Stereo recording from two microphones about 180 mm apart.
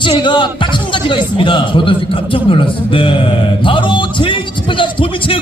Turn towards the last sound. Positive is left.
turn(degrees=30)  # may be behind; listen again after turning